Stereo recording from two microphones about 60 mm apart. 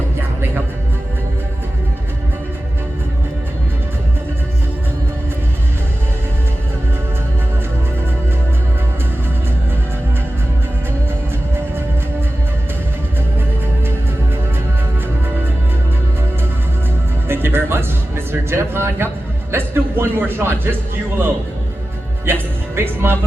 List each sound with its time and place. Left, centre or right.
17.2 s music: right
22.3 s music: right